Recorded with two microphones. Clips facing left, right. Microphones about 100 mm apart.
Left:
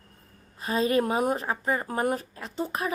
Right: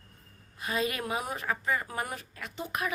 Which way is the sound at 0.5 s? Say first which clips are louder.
Left 7 dB; 35° left (ahead or behind).